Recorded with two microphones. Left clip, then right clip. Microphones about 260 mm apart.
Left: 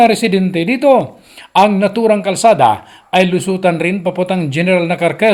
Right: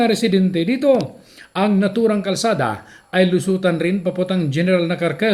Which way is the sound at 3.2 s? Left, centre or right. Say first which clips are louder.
Left 4 dB; centre.